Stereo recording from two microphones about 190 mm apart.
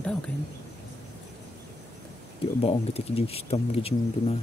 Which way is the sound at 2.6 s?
30° left (ahead or behind).